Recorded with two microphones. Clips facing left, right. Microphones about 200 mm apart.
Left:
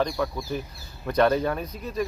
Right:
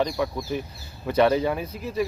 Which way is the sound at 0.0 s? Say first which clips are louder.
Right 1 dB; centre (ahead or behind).